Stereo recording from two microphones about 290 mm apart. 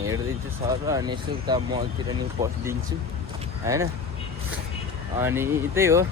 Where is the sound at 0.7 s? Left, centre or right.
Centre.